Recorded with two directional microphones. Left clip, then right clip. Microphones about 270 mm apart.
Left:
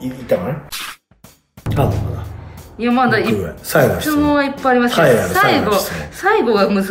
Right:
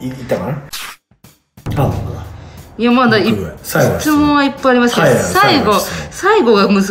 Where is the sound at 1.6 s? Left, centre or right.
Centre.